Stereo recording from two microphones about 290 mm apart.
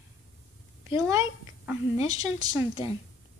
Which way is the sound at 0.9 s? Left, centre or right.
Centre.